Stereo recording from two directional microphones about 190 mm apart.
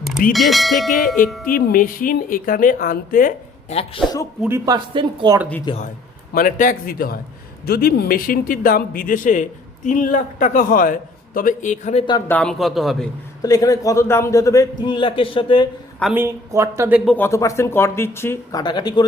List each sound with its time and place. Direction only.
0.3 s a man's voice: centre (ahead or behind)
1.5 s a man's voice: 45° left (ahead or behind)
3.8 s a man's voice: 30° left (ahead or behind)
4.4 s speech: 15° right (ahead or behind)
5.7 s a man's voice: 25° left (ahead or behind)
6.3 s a man's voice: 45° left (ahead or behind)
12.3 s a man's voice: 5° left (ahead or behind)
13.4 s a man's voice: 20° left (ahead or behind)
16.1 s speech: 15° right (ahead or behind)
17.1 s a man's voice: 10° left (ahead or behind)